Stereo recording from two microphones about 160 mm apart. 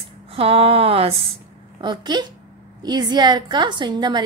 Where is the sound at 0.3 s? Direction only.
35° right (ahead or behind).